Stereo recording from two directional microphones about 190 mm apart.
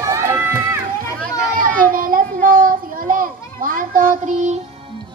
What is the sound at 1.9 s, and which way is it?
Children playing, 50° right (ahead or behind).